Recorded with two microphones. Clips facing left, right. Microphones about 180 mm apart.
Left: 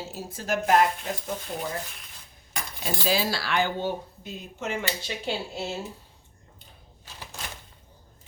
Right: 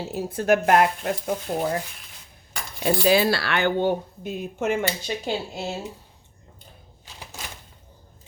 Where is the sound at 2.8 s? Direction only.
60° right (ahead or behind).